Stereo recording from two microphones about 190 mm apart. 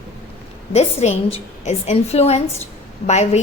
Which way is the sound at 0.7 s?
35° left (ahead or behind).